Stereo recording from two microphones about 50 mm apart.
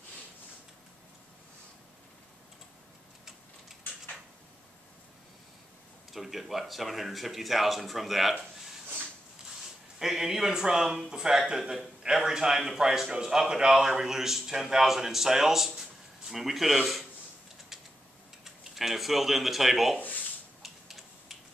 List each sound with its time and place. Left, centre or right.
6.1 s speech: centre
9.9 s speech: centre
18.4 s speech: centre
20.0 s a sound: left
20.6 s typing: centre